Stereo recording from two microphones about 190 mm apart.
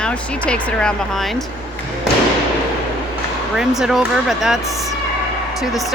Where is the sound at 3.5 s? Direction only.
Centre (ahead or behind).